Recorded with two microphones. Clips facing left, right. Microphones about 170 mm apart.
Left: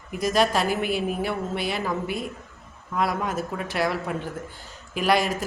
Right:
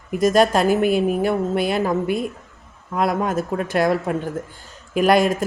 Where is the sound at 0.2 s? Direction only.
50° right (ahead or behind).